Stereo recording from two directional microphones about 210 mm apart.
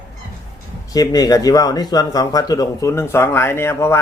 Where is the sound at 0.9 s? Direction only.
20° left (ahead or behind).